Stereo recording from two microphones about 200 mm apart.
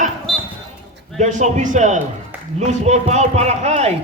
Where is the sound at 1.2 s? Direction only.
35° right (ahead or behind).